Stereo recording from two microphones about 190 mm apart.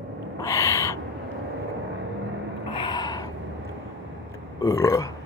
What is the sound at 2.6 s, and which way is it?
Gasp, 25° left (ahead or behind).